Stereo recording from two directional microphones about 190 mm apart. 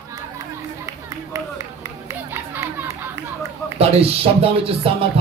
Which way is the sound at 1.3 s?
15° right (ahead or behind).